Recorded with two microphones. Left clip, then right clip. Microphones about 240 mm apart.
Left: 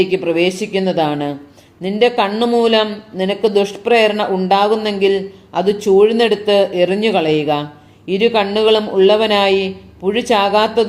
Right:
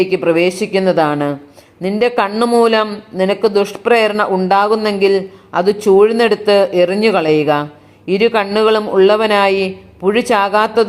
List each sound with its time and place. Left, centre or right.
0.0 s speech: right